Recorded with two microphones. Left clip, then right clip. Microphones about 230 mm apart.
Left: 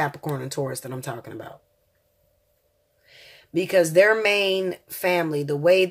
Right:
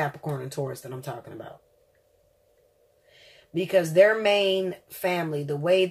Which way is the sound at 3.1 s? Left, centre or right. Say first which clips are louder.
Left 5 dB; left.